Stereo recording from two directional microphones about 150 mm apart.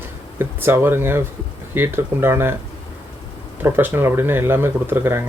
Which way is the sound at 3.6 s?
15° right (ahead or behind).